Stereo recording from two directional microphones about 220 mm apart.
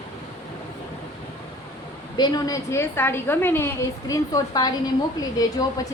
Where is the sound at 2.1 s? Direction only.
20° left (ahead or behind).